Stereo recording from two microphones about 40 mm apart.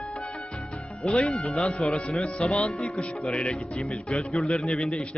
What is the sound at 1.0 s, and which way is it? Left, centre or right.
Speech, left.